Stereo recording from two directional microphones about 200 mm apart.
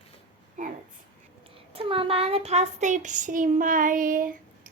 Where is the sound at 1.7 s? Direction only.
25° right (ahead or behind); by 4.3 s 45° right (ahead or behind).